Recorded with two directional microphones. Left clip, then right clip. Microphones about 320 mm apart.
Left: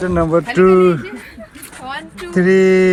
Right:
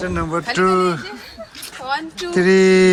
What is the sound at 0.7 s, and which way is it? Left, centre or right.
Speech, left.